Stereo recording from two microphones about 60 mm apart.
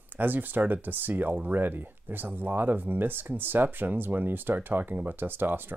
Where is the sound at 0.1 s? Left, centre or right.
Right.